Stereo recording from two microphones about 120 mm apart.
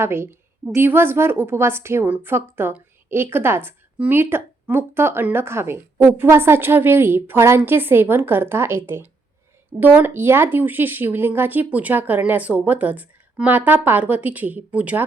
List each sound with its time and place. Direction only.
0.0 s a woman's voice: 20° right (ahead or behind)